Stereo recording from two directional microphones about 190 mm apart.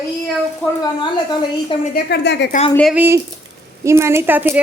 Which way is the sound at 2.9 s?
10° right (ahead or behind).